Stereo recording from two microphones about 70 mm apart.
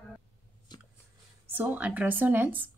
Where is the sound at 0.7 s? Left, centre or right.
Left.